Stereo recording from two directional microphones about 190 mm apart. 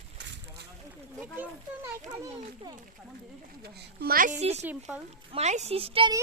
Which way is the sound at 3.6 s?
60° right (ahead or behind).